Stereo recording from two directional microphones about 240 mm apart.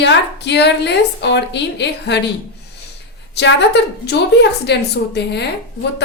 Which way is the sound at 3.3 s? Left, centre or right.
Left.